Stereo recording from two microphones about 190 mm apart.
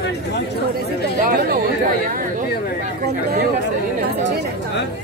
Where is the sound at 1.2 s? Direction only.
50° right (ahead or behind).